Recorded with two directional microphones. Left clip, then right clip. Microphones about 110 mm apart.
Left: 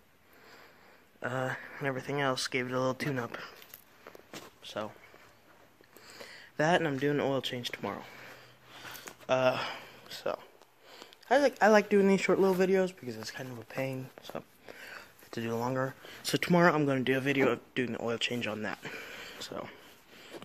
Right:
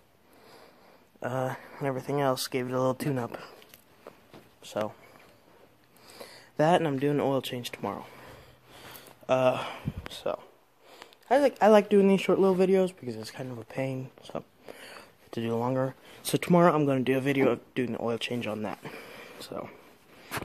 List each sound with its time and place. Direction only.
1.2 s speech: 20° right (ahead or behind)
1.6 s speech: 35° right (ahead or behind)
6.0 s a sound: 40° right (ahead or behind)
6.3 s speech: 55° right (ahead or behind); by 8.1 s 25° right (ahead or behind)
8.7 s a sound: 45° right (ahead or behind)
10.1 s speech: 20° right (ahead or behind); by 12.0 s 35° right (ahead or behind)
12.0 s speech: 25° right (ahead or behind)
12.5 s speech: 40° right (ahead or behind)
16.2 s speech: 25° right (ahead or behind)
17.2 s speech: 30° right (ahead or behind)